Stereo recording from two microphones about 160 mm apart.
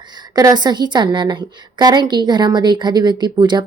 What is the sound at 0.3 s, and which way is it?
A woman's voice, 25° right (ahead or behind).